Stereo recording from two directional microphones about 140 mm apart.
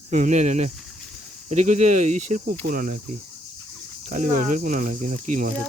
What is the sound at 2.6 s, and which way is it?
Speech, 90° right.